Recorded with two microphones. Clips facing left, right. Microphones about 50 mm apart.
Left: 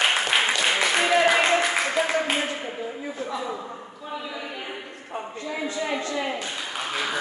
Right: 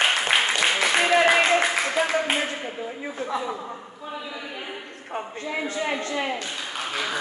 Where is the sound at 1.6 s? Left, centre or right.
Centre.